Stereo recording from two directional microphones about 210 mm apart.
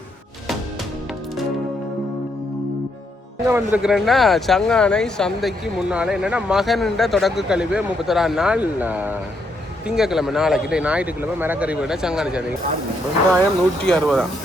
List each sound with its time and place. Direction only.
3.4 s speech: 10° right (ahead or behind)